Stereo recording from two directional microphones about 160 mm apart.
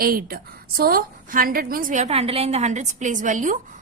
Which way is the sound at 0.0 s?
65° right (ahead or behind).